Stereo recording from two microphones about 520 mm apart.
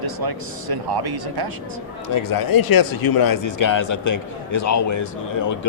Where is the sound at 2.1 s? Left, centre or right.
Left.